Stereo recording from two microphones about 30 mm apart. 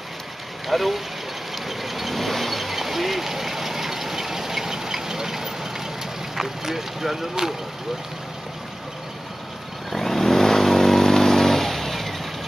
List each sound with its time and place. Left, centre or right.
0.7 s speech: centre
1.5 s a sound: centre
6.3 s speech: centre
9.8 s vehicle: centre